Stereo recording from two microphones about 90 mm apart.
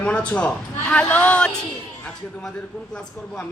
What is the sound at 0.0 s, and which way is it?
Speech, 15° left (ahead or behind).